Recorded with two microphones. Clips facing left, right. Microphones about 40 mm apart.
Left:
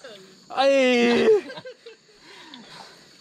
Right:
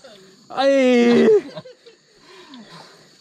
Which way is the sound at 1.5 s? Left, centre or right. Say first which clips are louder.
Right 1 dB; centre.